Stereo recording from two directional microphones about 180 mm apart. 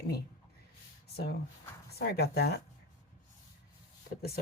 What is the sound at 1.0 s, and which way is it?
Speech, 60° left (ahead or behind).